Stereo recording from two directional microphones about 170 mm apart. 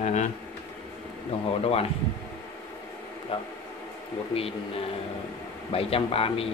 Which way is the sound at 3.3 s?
35° left (ahead or behind).